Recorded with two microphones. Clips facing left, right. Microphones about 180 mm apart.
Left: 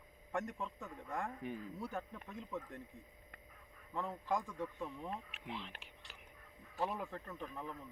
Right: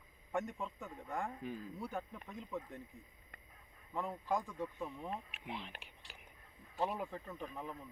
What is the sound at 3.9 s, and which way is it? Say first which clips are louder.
Speech: right 1 dB; 15° right (ahead or behind).